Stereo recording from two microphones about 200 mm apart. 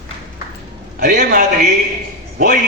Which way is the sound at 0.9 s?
50° right (ahead or behind).